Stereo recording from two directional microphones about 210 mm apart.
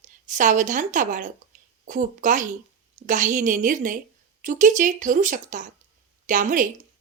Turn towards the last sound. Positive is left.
turn(degrees=-40)  # may be behind; listen again after turning